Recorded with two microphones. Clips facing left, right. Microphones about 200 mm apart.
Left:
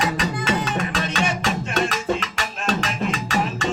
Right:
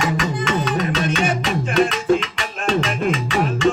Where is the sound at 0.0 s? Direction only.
35° left (ahead or behind).